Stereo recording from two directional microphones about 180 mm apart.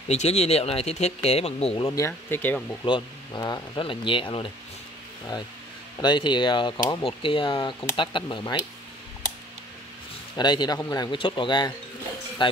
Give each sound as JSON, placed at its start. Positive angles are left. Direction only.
{"t": 0.1, "sound": "speech", "side_deg": 35}
{"t": 1.9, "sound": "speech", "side_deg": 15}
{"t": 2.8, "sound": "speech", "side_deg": 25}
{"t": 5.9, "sound": "speech", "side_deg": 25}
{"t": 10.3, "sound": "speech", "side_deg": 25}